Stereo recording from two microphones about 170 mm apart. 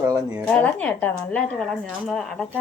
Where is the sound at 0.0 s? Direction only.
10° right (ahead or behind).